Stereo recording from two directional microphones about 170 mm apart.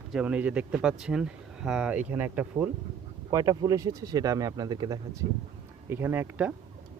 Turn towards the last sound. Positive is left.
turn(degrees=-10)  # may be behind; listen again after turning